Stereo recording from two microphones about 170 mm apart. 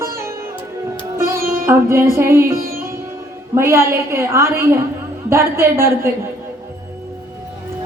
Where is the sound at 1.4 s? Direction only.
60° right (ahead or behind).